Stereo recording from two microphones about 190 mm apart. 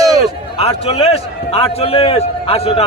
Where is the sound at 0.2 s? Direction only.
30° left (ahead or behind).